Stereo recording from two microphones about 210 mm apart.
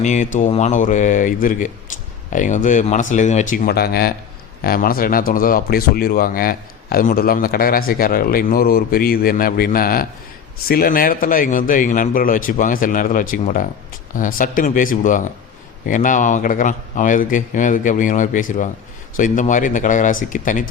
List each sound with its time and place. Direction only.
0.0 s speech: 35° left (ahead or behind)